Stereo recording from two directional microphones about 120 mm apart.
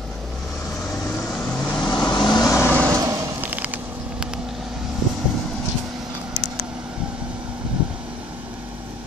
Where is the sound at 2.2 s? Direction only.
30° left (ahead or behind).